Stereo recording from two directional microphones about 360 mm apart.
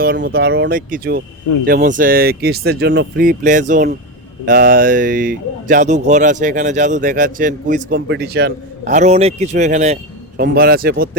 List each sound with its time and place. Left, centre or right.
0.0 s speech: right